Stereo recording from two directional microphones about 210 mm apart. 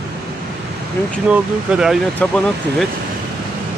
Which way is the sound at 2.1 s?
5° left (ahead or behind).